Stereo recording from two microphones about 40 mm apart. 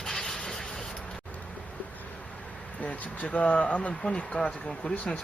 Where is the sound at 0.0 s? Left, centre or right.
Centre.